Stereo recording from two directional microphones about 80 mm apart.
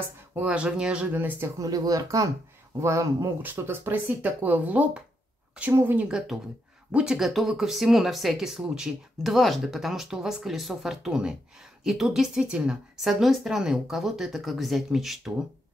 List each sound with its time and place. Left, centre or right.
0.4 s speech: centre
1.6 s speech: right
3.4 s speech: right
6.0 s speech: centre
7.2 s a woman's voice: centre